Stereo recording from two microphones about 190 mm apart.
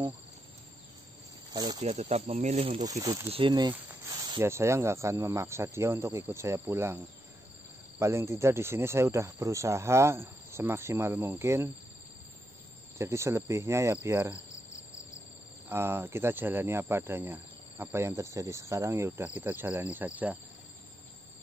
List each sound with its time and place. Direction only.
1.5 s speech: 20° right (ahead or behind)
1.8 s speech: 35° right (ahead or behind)
2.9 s speech: 20° right (ahead or behind)
8.0 s speech: 15° right (ahead or behind)
12.9 s speech: 15° right (ahead or behind)
15.7 s speech: 15° right (ahead or behind)